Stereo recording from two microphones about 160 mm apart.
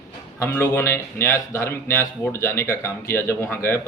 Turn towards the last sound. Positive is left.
turn(degrees=15)  # may be behind; listen again after turning